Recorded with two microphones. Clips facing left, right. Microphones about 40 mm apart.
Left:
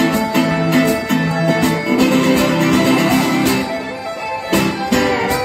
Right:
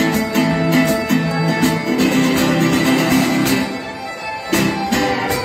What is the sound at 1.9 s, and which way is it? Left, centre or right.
Music, left.